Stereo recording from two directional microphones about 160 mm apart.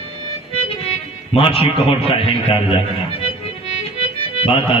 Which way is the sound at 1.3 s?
35° left (ahead or behind).